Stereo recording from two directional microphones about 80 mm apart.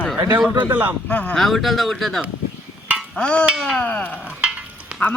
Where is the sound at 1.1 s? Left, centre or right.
Centre.